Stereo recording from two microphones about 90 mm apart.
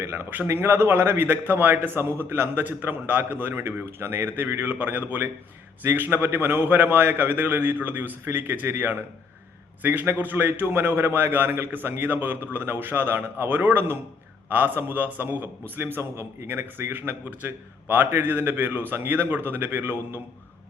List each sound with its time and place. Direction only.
0.0 s a man's voice: 25° right (ahead or behind)